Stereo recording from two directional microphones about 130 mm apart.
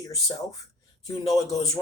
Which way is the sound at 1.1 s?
25° left (ahead or behind).